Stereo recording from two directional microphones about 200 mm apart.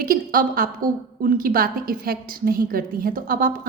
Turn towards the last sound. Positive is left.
turn(degrees=-45)  # may be behind; listen again after turning